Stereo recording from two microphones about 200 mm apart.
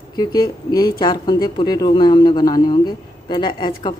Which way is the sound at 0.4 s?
20° left (ahead or behind).